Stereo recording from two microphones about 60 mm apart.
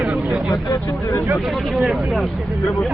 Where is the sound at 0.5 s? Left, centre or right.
Left.